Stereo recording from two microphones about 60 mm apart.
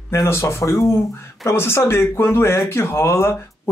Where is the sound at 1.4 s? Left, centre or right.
Left.